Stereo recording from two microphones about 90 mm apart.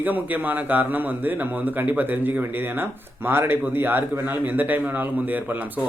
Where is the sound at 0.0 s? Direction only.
20° right (ahead or behind).